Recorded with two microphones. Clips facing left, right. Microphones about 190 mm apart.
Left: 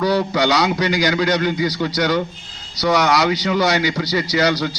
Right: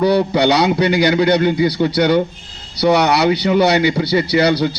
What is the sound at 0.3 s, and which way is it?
A man's voice, 30° right (ahead or behind).